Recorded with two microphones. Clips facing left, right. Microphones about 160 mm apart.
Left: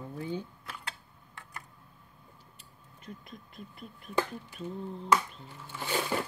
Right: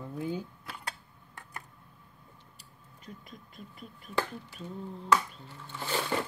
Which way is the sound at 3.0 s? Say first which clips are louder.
Left 2 dB; 40° right (ahead or behind).